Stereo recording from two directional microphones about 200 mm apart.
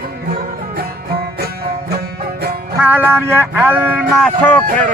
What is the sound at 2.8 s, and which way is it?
Speech, 10° right (ahead or behind).